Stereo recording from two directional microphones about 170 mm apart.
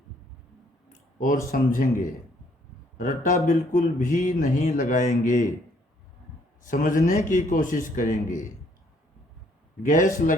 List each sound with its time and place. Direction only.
1.5 s speech: 55° left (ahead or behind)
6.6 s speech: 50° left (ahead or behind)
9.8 s speech: 45° left (ahead or behind)